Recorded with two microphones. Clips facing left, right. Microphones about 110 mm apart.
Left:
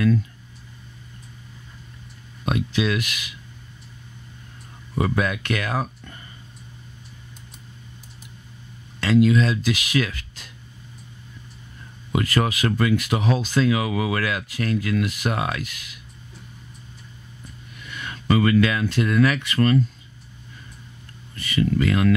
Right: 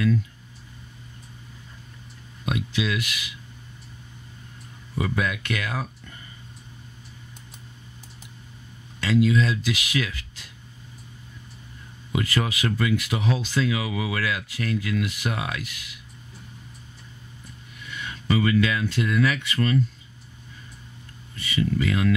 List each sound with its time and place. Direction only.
2.4 s speech: 45° left (ahead or behind)
4.9 s speech: 50° left (ahead or behind)
9.0 s speech: 55° left (ahead or behind)
12.1 s speech: 50° left (ahead or behind)
17.9 s speech: 55° left (ahead or behind)
21.4 s speech: 55° left (ahead or behind)